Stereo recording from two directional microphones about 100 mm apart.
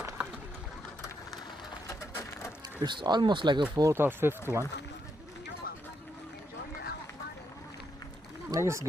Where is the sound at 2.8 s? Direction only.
45° right (ahead or behind).